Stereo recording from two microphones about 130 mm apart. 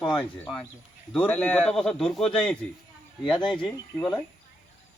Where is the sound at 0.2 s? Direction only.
10° left (ahead or behind).